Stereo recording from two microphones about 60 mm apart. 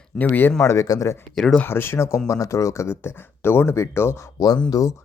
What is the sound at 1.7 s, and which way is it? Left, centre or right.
Speech, left.